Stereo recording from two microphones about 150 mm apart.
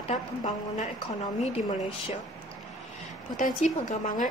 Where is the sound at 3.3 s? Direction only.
55° left (ahead or behind).